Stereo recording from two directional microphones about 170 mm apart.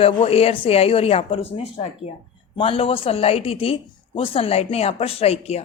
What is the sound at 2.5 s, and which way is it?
Speech, 35° left (ahead or behind).